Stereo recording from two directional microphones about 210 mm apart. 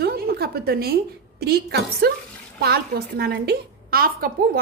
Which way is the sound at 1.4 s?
50° right (ahead or behind).